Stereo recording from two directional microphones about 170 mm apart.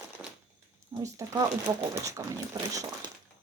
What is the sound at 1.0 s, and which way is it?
Speech, 20° right (ahead or behind).